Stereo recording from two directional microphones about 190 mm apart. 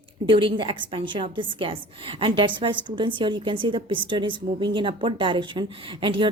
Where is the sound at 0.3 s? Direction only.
25° right (ahead or behind).